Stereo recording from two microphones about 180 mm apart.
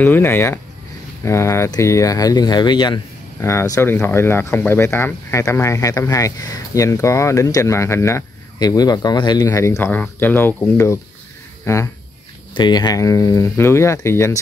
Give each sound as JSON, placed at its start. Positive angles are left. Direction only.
{"t": 0.0, "sound": "speech", "side_deg": 10}